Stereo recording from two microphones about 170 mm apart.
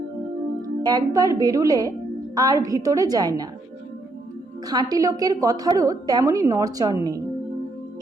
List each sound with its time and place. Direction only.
0.8 s a woman's voice: 25° right (ahead or behind)
4.6 s a woman's voice: 25° right (ahead or behind)